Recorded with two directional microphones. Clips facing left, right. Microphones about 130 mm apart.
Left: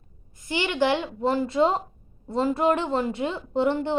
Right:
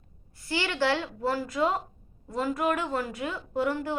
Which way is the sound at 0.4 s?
20° left (ahead or behind).